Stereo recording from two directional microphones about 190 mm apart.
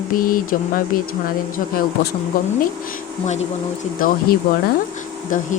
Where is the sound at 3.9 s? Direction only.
45° left (ahead or behind).